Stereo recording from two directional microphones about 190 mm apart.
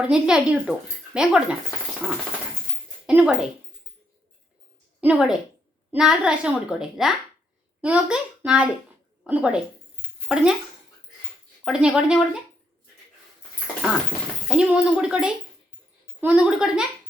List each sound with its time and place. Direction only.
0.0 s speech: 5° right (ahead or behind)
3.1 s speech: 5° right (ahead or behind)
4.9 s a woman's voice: 5° right (ahead or behind)
11.6 s speech: 5° right (ahead or behind)
14.4 s speech: 5° right (ahead or behind)